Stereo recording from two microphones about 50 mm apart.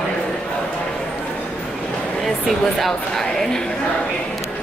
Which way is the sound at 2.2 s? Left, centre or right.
Centre.